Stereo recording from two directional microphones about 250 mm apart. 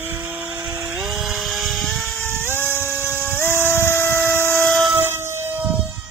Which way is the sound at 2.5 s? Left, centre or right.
Centre.